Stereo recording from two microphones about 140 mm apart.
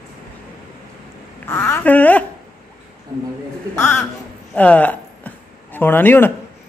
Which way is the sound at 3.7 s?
15° left (ahead or behind).